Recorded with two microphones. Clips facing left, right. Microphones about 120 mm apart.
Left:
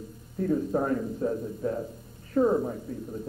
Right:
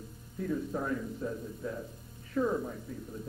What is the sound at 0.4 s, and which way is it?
A man's voice, 45° left (ahead or behind).